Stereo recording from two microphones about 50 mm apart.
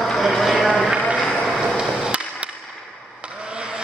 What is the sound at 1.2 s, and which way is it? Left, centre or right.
Run, centre.